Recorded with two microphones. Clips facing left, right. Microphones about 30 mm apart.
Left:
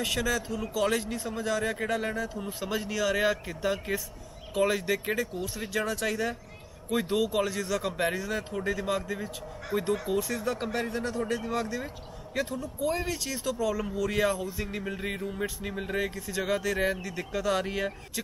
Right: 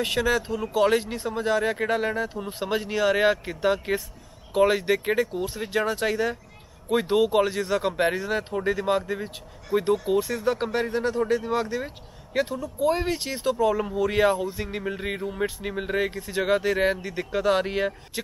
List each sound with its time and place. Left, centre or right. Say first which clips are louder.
0.0 s speech: right 5 dB; right
2.7 s speech: right 6 dB; right
9.7 s speech: right 6 dB; centre
10.1 s speech: right 5 dB; right
14.8 s music: right 5 dB; centre
15.6 s speech: right 4 dB; right